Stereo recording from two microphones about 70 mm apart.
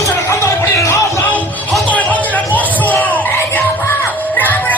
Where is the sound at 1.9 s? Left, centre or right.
Left.